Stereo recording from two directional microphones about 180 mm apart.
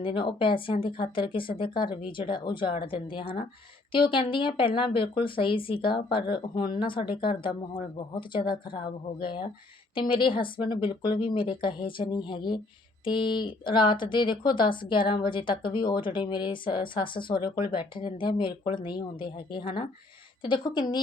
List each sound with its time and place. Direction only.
0.0 s speech: 25° left (ahead or behind)